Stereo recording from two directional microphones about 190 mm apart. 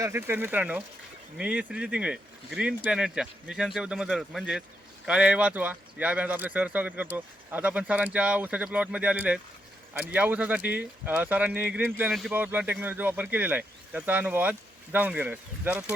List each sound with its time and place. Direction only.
0.0 s speech: 10° right (ahead or behind)